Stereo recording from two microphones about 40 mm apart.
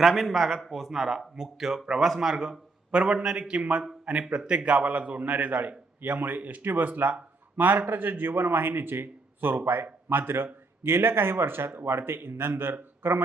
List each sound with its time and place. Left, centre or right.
0.0 s a man's voice: centre; by 4.4 s right
4.4 s a man's voice: right